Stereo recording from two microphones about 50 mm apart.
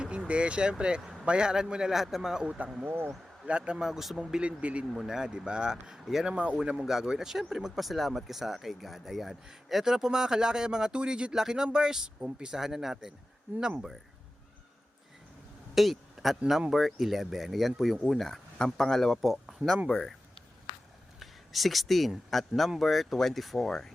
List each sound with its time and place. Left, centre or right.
0.3 s speech: right
2.8 s speech: right
3.4 s speech: right
3.8 s speech: centre
4.4 s speech: right
4.9 s speech: centre
6.2 s speech: right
6.8 s speech: centre
15.7 s a sound: centre
16.5 s speech: centre
19.9 s speech: centre
21.2 s a sound: centre
22.3 s speech: centre